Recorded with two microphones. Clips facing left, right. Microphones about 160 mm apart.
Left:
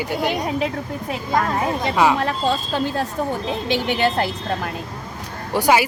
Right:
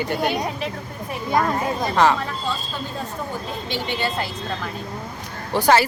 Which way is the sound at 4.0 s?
50° left (ahead or behind).